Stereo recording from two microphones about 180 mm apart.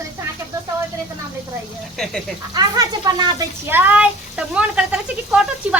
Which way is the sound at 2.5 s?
20° right (ahead or behind).